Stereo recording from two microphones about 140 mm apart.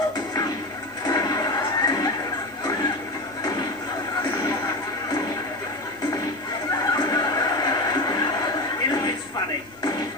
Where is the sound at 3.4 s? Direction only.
25° left (ahead or behind).